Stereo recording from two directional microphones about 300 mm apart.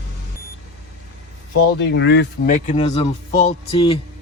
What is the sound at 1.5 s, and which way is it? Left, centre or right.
Speech, left.